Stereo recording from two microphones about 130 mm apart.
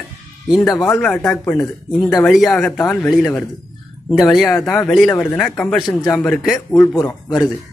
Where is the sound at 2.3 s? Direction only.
5° left (ahead or behind).